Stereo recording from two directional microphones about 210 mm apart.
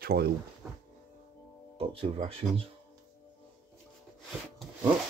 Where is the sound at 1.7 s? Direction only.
25° right (ahead or behind).